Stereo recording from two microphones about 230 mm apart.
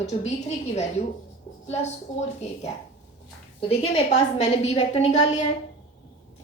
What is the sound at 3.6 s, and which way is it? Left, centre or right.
A woman's voice, left.